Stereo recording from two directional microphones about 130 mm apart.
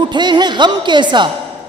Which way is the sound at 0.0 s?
35° right (ahead or behind).